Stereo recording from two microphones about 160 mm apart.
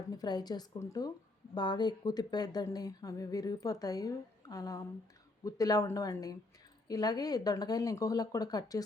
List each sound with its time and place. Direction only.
0.1 s a woman's voice: 25° left (ahead or behind)